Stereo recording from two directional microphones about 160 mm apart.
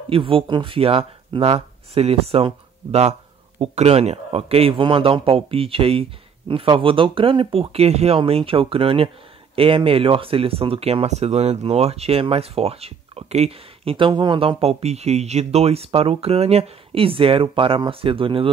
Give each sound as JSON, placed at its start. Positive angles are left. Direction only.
{"t": 0.1, "sound": "speech", "side_deg": -35}